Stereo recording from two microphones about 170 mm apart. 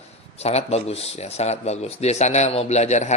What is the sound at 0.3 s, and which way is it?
Speech, 40° left (ahead or behind).